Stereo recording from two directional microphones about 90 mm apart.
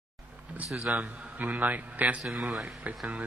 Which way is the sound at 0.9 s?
20° right (ahead or behind).